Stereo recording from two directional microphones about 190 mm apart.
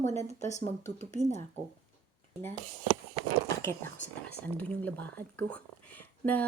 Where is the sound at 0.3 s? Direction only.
35° left (ahead or behind).